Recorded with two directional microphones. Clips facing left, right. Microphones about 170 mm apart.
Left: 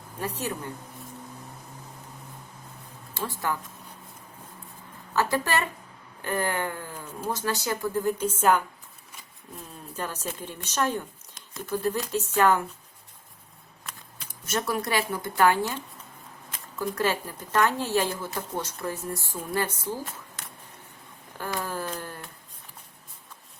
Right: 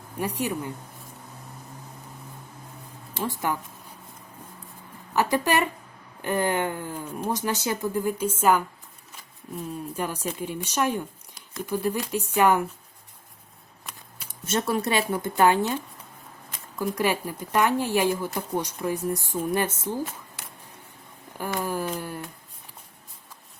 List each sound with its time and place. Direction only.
0.2 s speech: 15° right (ahead or behind)
3.2 s speech: 20° right (ahead or behind)
5.1 s speech: 15° right (ahead or behind)
9.9 s speech: 10° right (ahead or behind)
14.4 s speech: 25° right (ahead or behind)
21.6 s a sound: 15° right (ahead or behind)